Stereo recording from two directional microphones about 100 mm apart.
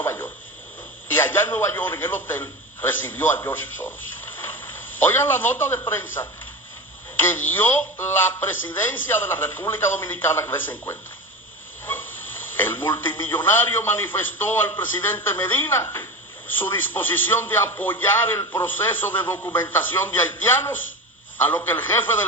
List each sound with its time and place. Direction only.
0.0 s a sound: 20° left (ahead or behind)
1.0 s a man's voice: 20° left (ahead or behind)
7.3 s a man's voice: 20° left (ahead or behind)
12.6 s a man's voice: 20° left (ahead or behind)